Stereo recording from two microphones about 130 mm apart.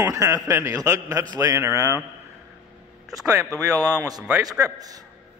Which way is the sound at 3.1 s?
25° right (ahead or behind).